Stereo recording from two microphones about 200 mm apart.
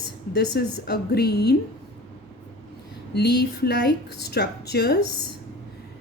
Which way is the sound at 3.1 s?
55° left (ahead or behind).